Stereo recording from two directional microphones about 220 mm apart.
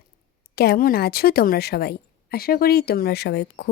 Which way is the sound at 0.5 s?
45° left (ahead or behind).